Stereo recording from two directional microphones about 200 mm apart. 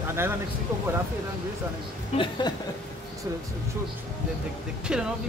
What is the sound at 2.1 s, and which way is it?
Speech, 25° left (ahead or behind).